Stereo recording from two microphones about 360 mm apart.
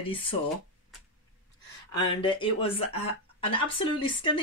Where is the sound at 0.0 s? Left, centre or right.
Centre.